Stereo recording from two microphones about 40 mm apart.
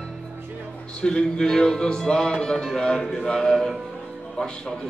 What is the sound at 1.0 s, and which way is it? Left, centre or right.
A man's voice, left.